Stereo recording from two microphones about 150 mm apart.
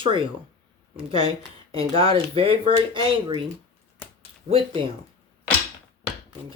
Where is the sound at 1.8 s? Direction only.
40° right (ahead or behind).